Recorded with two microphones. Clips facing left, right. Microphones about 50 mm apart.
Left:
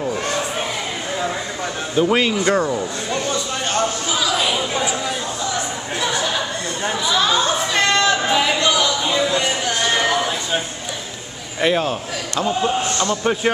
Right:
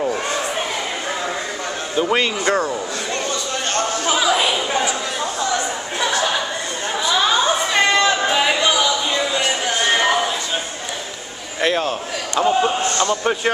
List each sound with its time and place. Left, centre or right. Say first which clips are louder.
2.0 s speech: left 2 dB; centre
4.2 s chatter: right 2 dB; centre
7.1 s a sound: right 1 dB; centre
11.6 s speech: left 1 dB; centre
12.4 s a man's voice: right 3 dB; centre
13.1 s speech: even; centre